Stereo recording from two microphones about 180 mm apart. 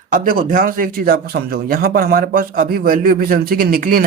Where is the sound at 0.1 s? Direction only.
50° right (ahead or behind).